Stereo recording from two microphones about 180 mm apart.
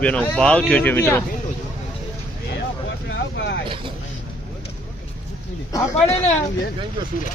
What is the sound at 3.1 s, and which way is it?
Vehicle, 80° left.